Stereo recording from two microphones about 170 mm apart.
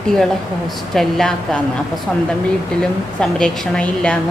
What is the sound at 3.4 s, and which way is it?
Speech, 5° left (ahead or behind).